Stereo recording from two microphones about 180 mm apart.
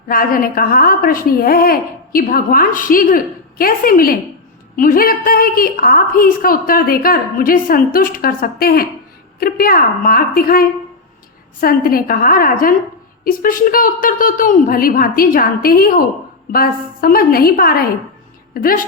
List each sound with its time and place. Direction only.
0.1 s a woman's voice: 50° left (ahead or behind)